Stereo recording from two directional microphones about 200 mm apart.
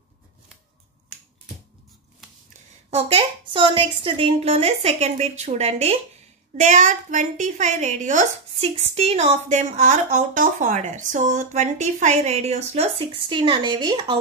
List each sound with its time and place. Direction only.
2.9 s a woman's voice: 30° right (ahead or behind)